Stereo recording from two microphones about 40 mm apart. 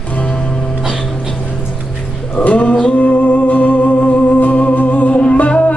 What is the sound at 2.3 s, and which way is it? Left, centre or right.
Music, left.